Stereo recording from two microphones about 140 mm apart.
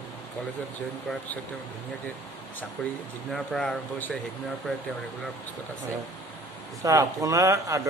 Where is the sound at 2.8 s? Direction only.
5° left (ahead or behind).